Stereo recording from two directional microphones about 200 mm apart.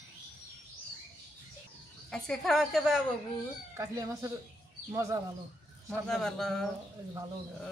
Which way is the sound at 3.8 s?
15° right (ahead or behind).